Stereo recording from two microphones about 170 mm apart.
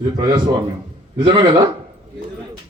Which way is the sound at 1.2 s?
30° right (ahead or behind).